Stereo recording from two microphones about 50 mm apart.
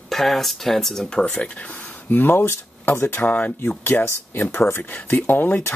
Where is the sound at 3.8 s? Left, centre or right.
Left.